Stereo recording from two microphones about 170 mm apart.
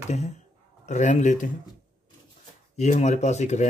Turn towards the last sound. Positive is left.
turn(degrees=45)  # may be behind; listen again after turning